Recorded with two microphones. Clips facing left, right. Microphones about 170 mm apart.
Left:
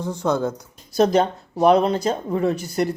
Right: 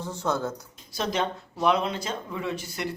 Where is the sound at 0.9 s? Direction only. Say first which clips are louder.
Left 11 dB; 40° left (ahead or behind).